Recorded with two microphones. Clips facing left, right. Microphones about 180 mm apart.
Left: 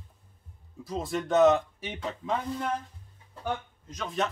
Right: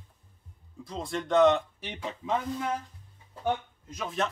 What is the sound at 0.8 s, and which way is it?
Speech, centre (ahead or behind).